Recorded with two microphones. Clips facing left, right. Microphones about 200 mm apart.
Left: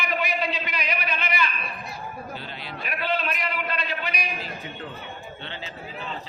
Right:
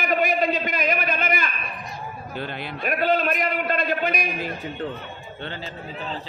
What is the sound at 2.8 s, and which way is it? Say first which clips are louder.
A man's voice: right 7 dB; 45° right (ahead or behind).